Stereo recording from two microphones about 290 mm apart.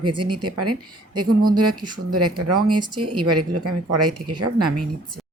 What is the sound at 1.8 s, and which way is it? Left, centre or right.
Speech, right.